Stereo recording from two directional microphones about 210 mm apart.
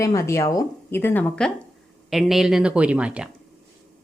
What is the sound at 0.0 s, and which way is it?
A woman's voice, 15° left (ahead or behind).